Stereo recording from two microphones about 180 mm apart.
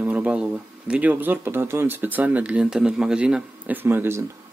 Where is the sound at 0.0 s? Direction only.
10° right (ahead or behind).